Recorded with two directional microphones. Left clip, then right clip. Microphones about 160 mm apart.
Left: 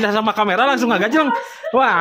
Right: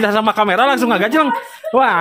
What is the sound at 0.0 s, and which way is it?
A man's voice, 20° right (ahead or behind).